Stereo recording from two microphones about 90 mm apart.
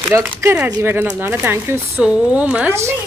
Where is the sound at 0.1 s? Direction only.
40° right (ahead or behind).